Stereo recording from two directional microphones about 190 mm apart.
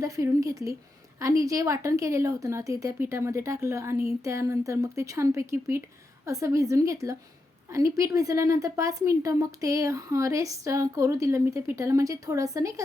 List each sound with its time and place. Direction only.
0.0 s a woman's voice: 15° right (ahead or behind)